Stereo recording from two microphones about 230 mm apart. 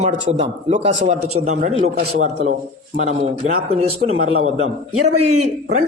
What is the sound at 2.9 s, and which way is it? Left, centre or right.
A man's voice, right.